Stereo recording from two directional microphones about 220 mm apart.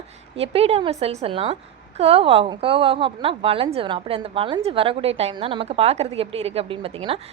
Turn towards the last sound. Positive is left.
turn(degrees=-25)  # may be behind; listen again after turning